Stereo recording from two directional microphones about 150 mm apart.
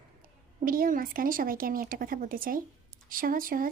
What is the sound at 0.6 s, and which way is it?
Speech, 70° right (ahead or behind).